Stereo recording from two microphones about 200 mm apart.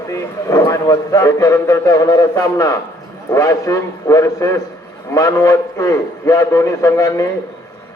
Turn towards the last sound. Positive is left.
turn(degrees=15)  # may be behind; listen again after turning